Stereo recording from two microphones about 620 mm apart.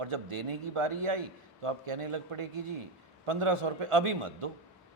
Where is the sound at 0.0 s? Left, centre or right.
Right.